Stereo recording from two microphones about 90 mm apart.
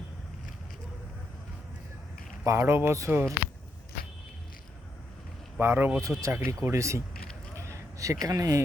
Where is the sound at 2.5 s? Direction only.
30° right (ahead or behind).